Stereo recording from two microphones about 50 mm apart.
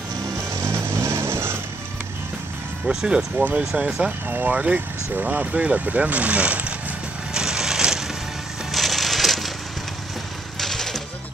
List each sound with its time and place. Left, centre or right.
0.8 s vehicle: right
2.9 s speech: centre
3.5 s speech: right
4.3 s speech: right
5.2 s speech: right
7.3 s a sound: centre
8.7 s a sound: centre
10.6 s music: centre